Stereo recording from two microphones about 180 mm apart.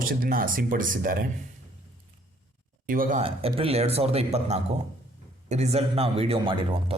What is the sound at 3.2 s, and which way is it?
Speech, 30° right (ahead or behind).